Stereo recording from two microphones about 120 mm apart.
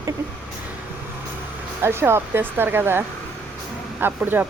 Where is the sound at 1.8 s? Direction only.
20° right (ahead or behind).